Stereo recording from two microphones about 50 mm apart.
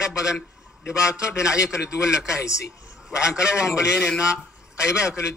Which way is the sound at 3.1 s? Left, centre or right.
Centre.